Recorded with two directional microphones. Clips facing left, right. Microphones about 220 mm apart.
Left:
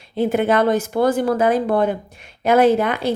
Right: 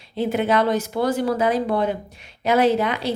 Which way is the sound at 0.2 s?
50° left (ahead or behind).